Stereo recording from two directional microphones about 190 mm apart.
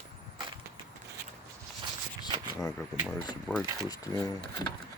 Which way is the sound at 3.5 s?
5° left (ahead or behind).